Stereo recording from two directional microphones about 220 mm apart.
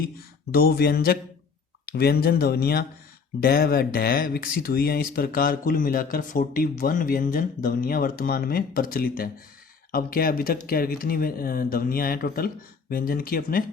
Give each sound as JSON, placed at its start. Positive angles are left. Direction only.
{"t": 0.5, "sound": "speech", "side_deg": 45}